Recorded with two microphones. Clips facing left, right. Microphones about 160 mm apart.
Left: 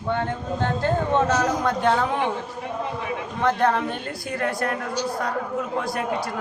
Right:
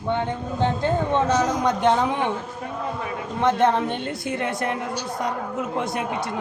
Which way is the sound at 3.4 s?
20° right (ahead or behind).